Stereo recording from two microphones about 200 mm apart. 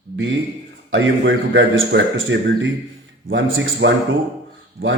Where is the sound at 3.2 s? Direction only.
65° right (ahead or behind).